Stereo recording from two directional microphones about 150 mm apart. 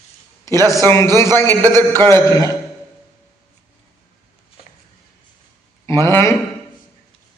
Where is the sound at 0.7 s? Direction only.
20° left (ahead or behind).